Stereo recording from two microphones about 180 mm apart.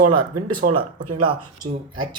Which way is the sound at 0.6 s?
55° right (ahead or behind).